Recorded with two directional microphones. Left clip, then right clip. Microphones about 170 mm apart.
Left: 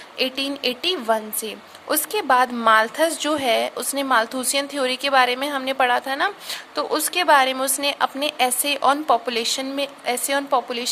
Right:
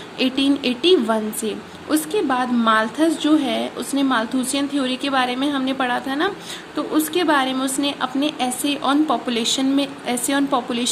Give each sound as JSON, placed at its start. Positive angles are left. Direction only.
{"t": 0.2, "sound": "speech", "side_deg": 35}